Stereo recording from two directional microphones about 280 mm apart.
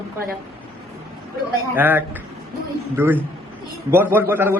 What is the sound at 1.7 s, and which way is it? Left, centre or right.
A man's voice, centre.